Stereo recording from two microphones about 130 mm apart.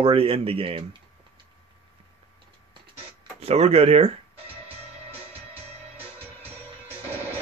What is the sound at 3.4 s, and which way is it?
Speech, 55° right (ahead or behind).